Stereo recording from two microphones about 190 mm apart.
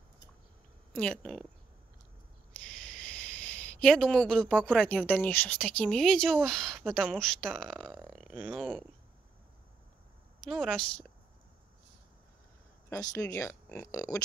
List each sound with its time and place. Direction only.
0.9 s a woman's voice: 5° left (ahead or behind)
2.5 s speech: 5° left (ahead or behind)
10.4 s a woman's voice: centre (ahead or behind)
12.9 s speech: 15° left (ahead or behind)